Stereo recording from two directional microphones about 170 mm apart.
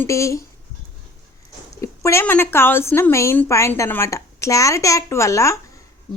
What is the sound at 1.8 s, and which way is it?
A woman's voice, 15° left (ahead or behind).